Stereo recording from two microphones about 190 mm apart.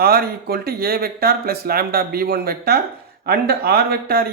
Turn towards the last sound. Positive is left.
turn(degrees=-55)  # may be behind; listen again after turning